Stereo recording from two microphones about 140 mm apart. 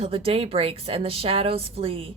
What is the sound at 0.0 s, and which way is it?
A woman's voice, 45° right (ahead or behind).